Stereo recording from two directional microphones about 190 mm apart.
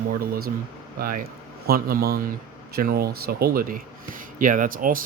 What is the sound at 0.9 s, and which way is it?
Speech, 50° right (ahead or behind).